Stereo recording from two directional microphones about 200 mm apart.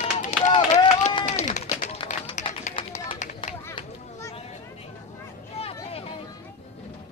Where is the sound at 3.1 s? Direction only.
40° left (ahead or behind).